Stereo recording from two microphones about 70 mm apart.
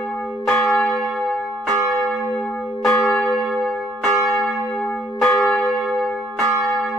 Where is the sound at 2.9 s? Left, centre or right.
Centre.